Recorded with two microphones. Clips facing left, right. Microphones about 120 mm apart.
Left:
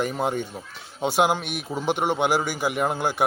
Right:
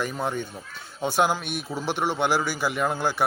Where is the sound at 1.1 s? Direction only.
65° left (ahead or behind).